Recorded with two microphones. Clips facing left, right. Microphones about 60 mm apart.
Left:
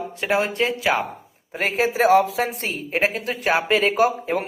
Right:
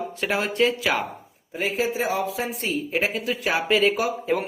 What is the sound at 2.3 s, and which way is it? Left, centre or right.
Speech, left.